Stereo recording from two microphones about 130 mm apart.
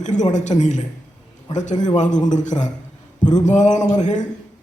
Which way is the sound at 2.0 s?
70° left (ahead or behind).